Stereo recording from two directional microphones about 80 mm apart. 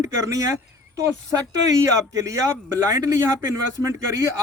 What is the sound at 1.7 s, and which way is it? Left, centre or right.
A man's voice, right.